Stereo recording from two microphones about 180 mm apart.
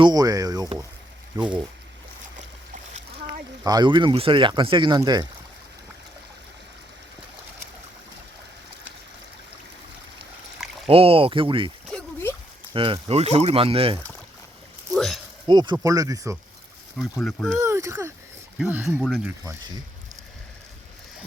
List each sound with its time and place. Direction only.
0.0 s speech: 20° right (ahead or behind)
2.7 s splash: 40° right (ahead or behind)
3.6 s speech: 20° right (ahead or behind)
10.8 s speech: 30° right (ahead or behind)
11.9 s a sound: 10° left (ahead or behind)
12.7 s speech: 30° right (ahead or behind)
14.9 s a sound: centre (ahead or behind)
15.4 s speech: 25° right (ahead or behind)
17.2 s speech: 5° left (ahead or behind)
17.6 s speech: 15° right (ahead or behind)